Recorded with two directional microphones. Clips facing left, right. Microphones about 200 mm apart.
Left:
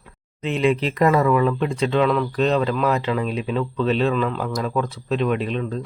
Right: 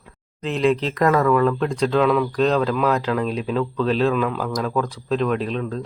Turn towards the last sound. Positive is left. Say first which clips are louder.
# even
turn(degrees=0)  # may be behind; listen again after turning